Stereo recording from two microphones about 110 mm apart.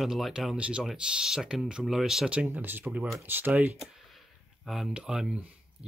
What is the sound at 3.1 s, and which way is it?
Speech, 20° right (ahead or behind).